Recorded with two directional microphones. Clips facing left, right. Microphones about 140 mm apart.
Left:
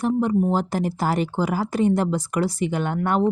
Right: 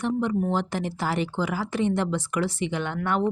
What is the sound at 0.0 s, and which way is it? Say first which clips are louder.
Speech: left 4 dB; 40° left (ahead or behind).